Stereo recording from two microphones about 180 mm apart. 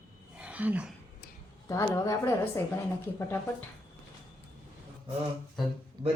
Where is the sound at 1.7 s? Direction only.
20° left (ahead or behind).